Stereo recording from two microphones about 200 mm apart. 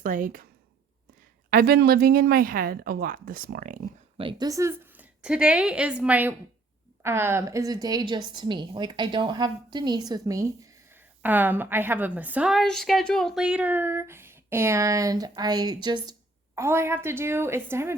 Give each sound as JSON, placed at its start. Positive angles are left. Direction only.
{"t": 0.0, "sound": "speech", "side_deg": -45}
{"t": 1.5, "sound": "speech", "side_deg": -50}
{"t": 4.2, "sound": "a woman's voice", "side_deg": -20}